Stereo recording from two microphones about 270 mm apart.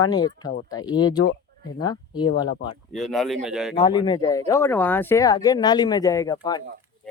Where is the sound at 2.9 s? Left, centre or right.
Centre.